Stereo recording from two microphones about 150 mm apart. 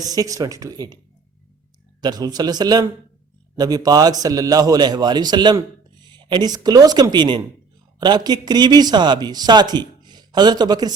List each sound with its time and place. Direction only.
0.0 s a man's voice: 25° right (ahead or behind)
2.0 s a man's voice: 30° right (ahead or behind)